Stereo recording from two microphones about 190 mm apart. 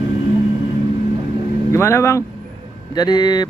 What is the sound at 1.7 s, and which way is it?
Speech, 15° left (ahead or behind).